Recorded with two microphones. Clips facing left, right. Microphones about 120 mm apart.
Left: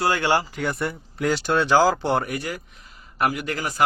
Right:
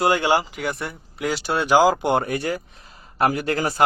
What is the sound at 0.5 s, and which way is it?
Speech, centre (ahead or behind).